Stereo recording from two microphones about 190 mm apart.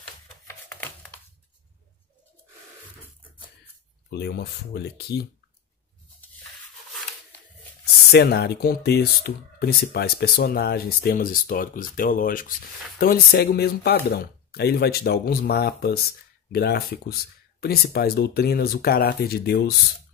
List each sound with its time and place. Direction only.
0.5 s a sound: 10° left (ahead or behind)
4.1 s speech: 60° left (ahead or behind)
8.1 s speech: 60° left (ahead or behind)